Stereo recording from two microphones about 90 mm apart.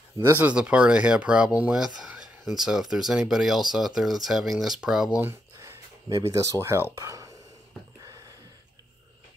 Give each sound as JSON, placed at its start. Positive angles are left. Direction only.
{"t": 0.3, "sound": "speech", "side_deg": -15}
{"t": 5.2, "sound": "speech", "side_deg": -30}